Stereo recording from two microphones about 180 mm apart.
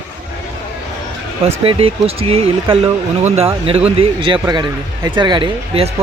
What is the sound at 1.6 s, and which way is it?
Speech, 30° right (ahead or behind).